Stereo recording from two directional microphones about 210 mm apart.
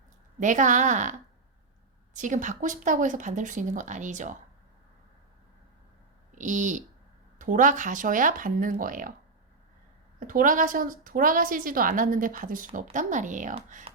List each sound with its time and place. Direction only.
0.3 s a woman's voice: 35° right (ahead or behind)
2.1 s a woman's voice: 35° right (ahead or behind)
6.3 s a woman's voice: 35° right (ahead or behind)
10.2 s a woman's voice: 40° right (ahead or behind)